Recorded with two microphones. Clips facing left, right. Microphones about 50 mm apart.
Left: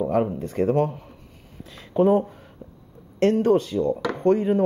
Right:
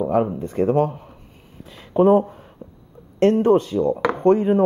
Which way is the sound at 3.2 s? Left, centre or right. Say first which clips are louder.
Right 3 dB; right.